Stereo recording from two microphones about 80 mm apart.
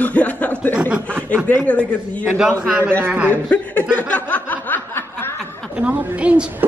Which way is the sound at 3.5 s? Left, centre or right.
Centre.